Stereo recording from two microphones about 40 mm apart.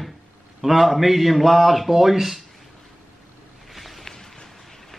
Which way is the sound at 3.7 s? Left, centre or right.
Centre.